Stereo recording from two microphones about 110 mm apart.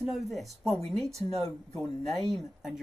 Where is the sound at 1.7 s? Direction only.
40° left (ahead or behind).